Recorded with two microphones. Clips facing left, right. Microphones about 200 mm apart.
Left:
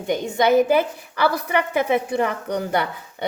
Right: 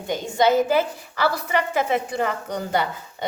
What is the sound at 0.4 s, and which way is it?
A woman's voice, 60° left (ahead or behind).